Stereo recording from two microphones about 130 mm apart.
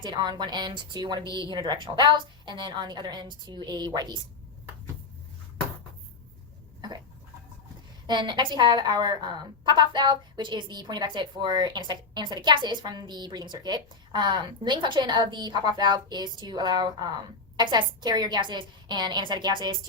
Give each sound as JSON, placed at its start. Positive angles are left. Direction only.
{"t": 0.0, "sound": "a woman's voice", "side_deg": -35}
{"t": 8.0, "sound": "a woman's voice", "side_deg": -35}